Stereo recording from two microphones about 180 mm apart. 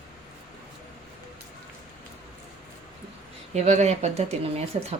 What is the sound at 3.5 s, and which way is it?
Speech, 40° right (ahead or behind).